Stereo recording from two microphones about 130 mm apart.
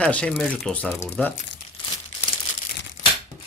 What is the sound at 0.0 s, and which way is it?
Speech, 10° left (ahead or behind).